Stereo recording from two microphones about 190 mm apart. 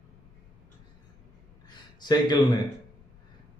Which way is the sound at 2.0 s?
20° left (ahead or behind).